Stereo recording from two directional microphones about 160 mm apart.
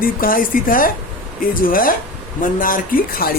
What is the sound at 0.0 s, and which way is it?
Speech, 60° left (ahead or behind).